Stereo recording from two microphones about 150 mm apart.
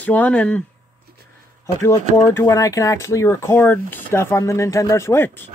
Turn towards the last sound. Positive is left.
turn(degrees=15)  # may be behind; listen again after turning